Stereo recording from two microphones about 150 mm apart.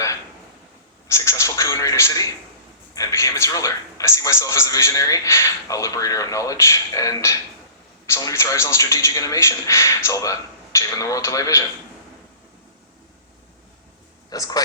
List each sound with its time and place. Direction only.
1.0 s television: 20° left (ahead or behind)
2.9 s a sound: 20° left (ahead or behind)
8.0 s a man's voice: 20° left (ahead or behind)
14.3 s a man's voice: 25° left (ahead or behind)